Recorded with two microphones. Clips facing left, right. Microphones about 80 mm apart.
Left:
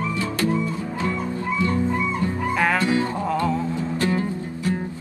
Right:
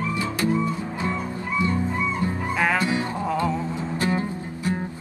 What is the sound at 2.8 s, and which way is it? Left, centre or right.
Music, right.